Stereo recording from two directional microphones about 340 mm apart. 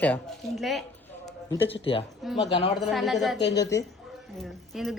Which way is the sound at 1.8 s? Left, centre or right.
Centre.